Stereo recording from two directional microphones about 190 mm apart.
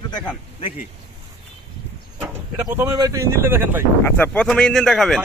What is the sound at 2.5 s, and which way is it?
A man's voice, 10° right (ahead or behind).